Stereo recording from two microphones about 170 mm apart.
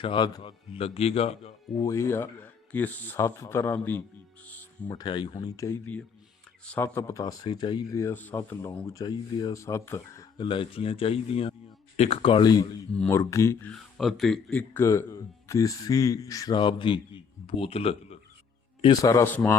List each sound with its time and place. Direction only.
0.0 s a man's voice: 30° left (ahead or behind)
1.8 s speech: 15° left (ahead or behind)
4.4 s cricket: 10° left (ahead or behind)
4.9 s speech: 25° left (ahead or behind)
10.3 s a man's voice: 30° left (ahead or behind)
18.8 s speech: 25° left (ahead or behind)